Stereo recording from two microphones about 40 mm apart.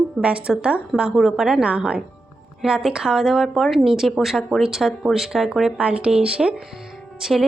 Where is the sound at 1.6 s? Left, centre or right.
Right.